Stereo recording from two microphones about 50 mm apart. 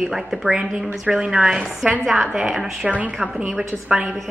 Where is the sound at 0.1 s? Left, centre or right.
Centre.